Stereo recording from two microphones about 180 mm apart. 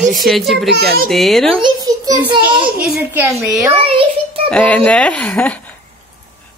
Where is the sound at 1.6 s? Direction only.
20° right (ahead or behind).